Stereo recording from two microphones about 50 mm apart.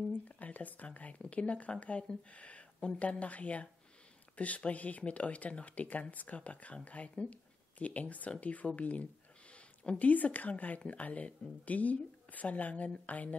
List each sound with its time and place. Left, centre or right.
0.4 s speech: left